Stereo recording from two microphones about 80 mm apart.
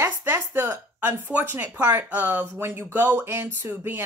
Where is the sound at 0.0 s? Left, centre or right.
Right.